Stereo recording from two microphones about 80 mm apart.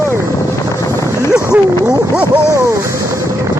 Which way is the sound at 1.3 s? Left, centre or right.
Centre.